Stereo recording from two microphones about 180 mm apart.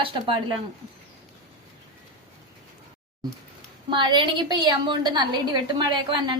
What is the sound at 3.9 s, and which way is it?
A woman's voice, 25° right (ahead or behind).